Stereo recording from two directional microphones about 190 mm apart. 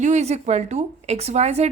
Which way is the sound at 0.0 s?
35° right (ahead or behind).